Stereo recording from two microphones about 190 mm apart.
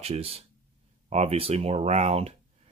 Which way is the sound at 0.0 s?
30° right (ahead or behind).